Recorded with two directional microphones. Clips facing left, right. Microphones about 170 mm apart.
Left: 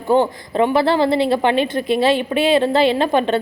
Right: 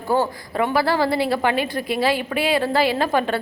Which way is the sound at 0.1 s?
20° left (ahead or behind).